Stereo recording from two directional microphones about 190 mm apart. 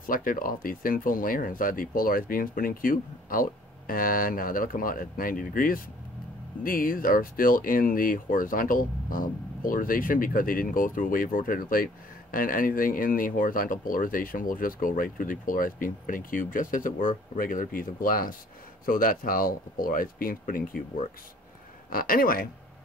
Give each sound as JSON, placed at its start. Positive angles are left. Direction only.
{"t": 0.0, "sound": "speech", "side_deg": 45}